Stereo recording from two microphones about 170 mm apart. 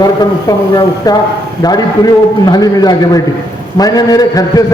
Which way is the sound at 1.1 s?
20° left (ahead or behind).